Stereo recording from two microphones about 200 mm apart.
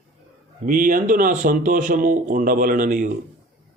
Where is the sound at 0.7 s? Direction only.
45° right (ahead or behind).